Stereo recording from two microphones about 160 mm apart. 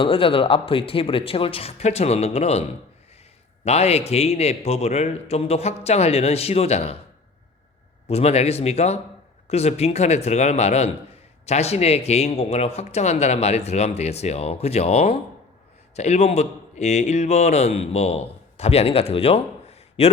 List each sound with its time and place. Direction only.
0.0 s speech: 35° left (ahead or behind)
8.0 s a man's voice: 40° left (ahead or behind)